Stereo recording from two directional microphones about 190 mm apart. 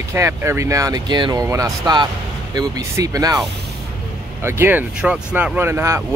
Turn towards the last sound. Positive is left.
turn(degrees=-15)  # may be behind; listen again after turning